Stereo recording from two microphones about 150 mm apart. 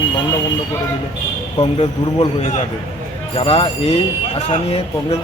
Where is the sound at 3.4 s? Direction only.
40° left (ahead or behind).